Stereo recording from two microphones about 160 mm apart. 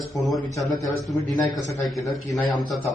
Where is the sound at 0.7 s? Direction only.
20° left (ahead or behind).